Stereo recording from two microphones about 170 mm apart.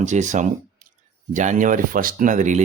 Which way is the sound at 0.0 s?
45° right (ahead or behind).